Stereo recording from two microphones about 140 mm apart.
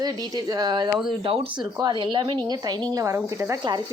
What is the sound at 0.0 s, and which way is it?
Speech, 30° right (ahead or behind).